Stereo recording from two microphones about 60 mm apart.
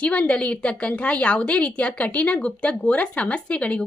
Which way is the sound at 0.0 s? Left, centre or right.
Left.